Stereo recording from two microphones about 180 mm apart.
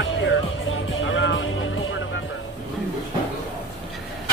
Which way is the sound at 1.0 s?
90° left.